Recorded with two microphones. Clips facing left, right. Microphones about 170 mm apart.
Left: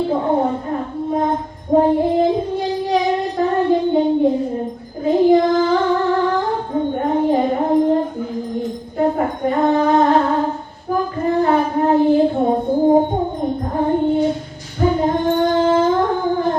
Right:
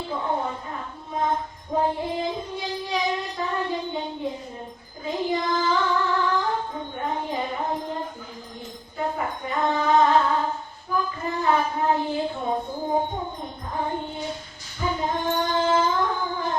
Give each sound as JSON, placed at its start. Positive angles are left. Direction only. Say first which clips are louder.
{"t": 0.1, "sound": "a sound", "louder": "left 10 dB", "side_deg": 45}
{"t": 1.7, "sound": "child singing", "louder": "left 11 dB", "side_deg": 50}
{"t": 5.3, "sound": "music", "louder": "left 11 dB", "side_deg": 55}
{"t": 6.9, "sound": "music", "louder": "left 11 dB", "side_deg": 45}
{"t": 9.0, "sound": "music", "louder": "left 10 dB", "side_deg": 50}
{"t": 10.8, "sound": "child singing", "louder": "left 9 dB", "side_deg": 50}
{"t": 12.8, "sound": "music", "louder": "left 14 dB", "side_deg": 50}
{"t": 14.8, "sound": "singing", "louder": "left 10 dB", "side_deg": 50}